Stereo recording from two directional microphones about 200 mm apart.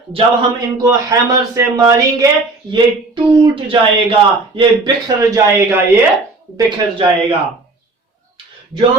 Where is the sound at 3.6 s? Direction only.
25° right (ahead or behind).